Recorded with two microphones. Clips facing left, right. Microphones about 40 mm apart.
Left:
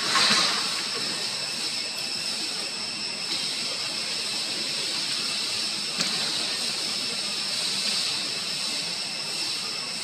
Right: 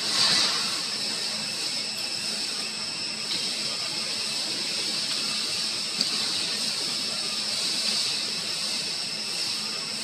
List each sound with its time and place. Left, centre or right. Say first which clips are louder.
0.1 s vehicle: left 3 dB; left